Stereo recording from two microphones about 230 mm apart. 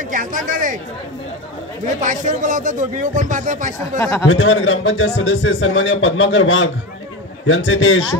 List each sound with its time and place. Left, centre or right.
0.1 s speech: right
2.0 s speech: right
4.0 s speech: centre
4.3 s a man's voice: left